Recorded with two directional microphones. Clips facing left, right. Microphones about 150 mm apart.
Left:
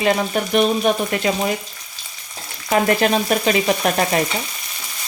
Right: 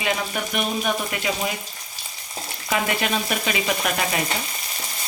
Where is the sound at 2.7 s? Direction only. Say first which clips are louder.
Left 7 dB; 40° left (ahead or behind).